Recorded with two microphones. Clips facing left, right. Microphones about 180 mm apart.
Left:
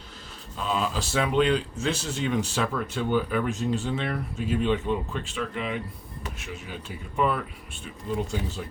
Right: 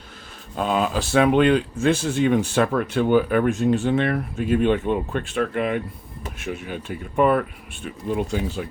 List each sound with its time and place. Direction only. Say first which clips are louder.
0.5 s speech: right 6 dB; 60° right (ahead or behind)